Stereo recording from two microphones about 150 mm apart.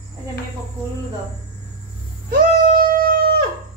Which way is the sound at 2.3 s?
70° right (ahead or behind).